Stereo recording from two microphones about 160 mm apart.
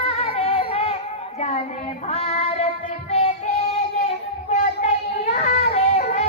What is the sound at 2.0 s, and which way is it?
Female singing, 45° left (ahead or behind).